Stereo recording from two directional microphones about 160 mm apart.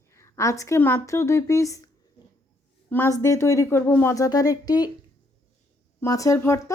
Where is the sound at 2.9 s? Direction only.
15° left (ahead or behind).